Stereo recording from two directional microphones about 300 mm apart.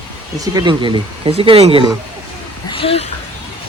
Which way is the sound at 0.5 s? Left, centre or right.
Centre.